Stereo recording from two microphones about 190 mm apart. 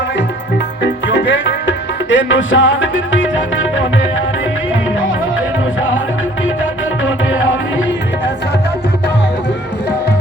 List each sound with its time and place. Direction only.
1.1 s music: 70° left (ahead or behind); by 3.8 s 85° left